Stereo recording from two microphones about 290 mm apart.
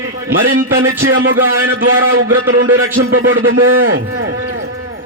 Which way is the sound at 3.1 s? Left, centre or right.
Right.